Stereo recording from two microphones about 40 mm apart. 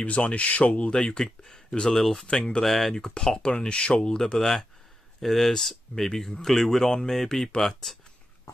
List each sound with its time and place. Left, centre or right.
0.0 s speech: left; by 2.2 s centre
2.2 s speech: left
2.6 s speech: centre
3.0 s speech: centre